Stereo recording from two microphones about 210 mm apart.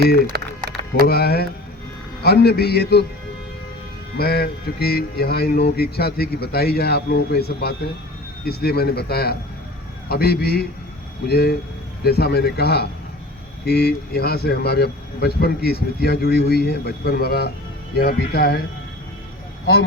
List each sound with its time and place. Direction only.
0.3 s a sound: 50° right (ahead or behind)
1.0 s speech: 45° left (ahead or behind)
4.2 s speech: 50° left (ahead or behind)